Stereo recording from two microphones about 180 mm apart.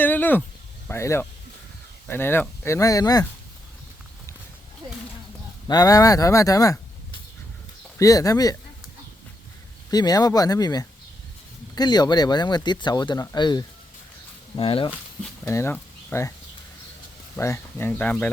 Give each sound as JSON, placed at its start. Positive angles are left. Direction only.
{"t": 0.0, "sound": "a sound", "side_deg": 10}
{"t": 0.9, "sound": "speech", "side_deg": 15}
{"t": 5.6, "sound": "speech", "side_deg": 20}
{"t": 7.9, "sound": "speech", "side_deg": 20}
{"t": 9.9, "sound": "speech", "side_deg": 20}
{"t": 15.4, "sound": "speech", "side_deg": 15}
{"t": 17.3, "sound": "speech", "side_deg": 15}